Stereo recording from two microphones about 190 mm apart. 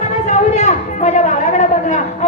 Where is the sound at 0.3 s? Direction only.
35° left (ahead or behind).